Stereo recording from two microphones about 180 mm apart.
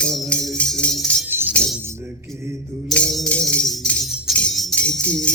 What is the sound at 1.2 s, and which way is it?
Music, 10° right (ahead or behind).